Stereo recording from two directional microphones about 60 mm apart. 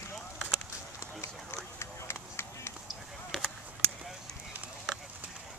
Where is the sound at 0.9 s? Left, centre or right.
Left.